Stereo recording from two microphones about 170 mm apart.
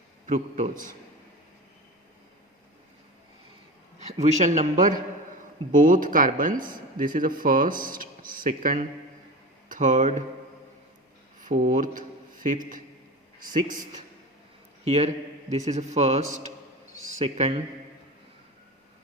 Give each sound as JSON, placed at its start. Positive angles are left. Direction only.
{"t": 0.3, "sound": "a man's voice", "side_deg": -45}
{"t": 4.0, "sound": "a man's voice", "side_deg": -45}
{"t": 11.3, "sound": "a sound", "side_deg": -50}
{"t": 13.4, "sound": "a man's voice", "side_deg": -55}
{"t": 14.8, "sound": "a man's voice", "side_deg": -40}